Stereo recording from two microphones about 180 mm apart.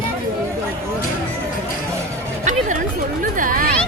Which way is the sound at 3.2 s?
50° right (ahead or behind).